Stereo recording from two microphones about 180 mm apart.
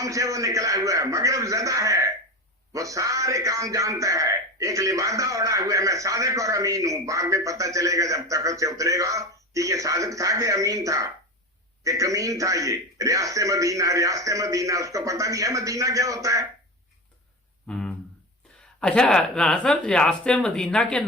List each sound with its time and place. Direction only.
0.0 s a man's voice: 15° right (ahead or behind)
17.7 s speech: 5° left (ahead or behind)